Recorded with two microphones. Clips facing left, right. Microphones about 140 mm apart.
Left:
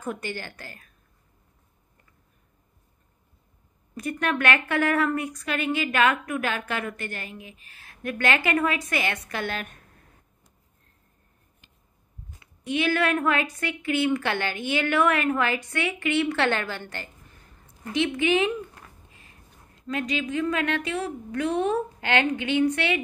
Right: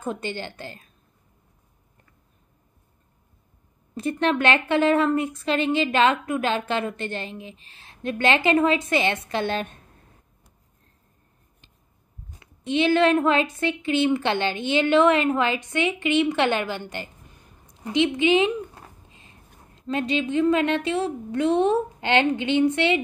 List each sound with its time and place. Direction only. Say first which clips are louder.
0.0 s a woman's voice: right 3 dB; 25° right (ahead or behind)
3.9 s a woman's voice: right 4 dB; 30° right (ahead or behind)
12.6 s a woman's voice: right 5 dB; 25° right (ahead or behind)